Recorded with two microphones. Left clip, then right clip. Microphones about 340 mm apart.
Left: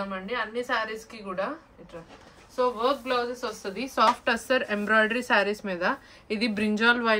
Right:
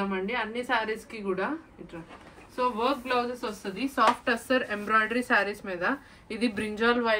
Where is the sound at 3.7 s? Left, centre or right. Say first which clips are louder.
Left 1 dB; left.